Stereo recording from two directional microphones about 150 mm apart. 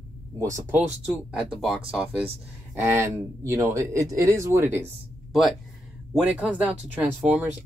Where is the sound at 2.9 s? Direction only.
15° right (ahead or behind).